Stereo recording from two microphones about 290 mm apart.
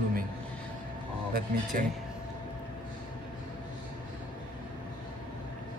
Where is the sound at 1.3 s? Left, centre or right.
Right.